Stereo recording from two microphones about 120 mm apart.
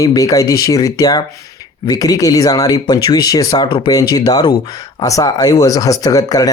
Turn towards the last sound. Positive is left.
turn(degrees=30)  # may be behind; listen again after turning